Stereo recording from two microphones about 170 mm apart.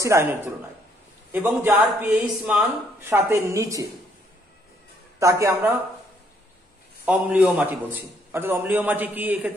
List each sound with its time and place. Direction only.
0.0 s speech: 15° right (ahead or behind)
5.2 s speech: 20° right (ahead or behind)
7.1 s speech: 10° right (ahead or behind)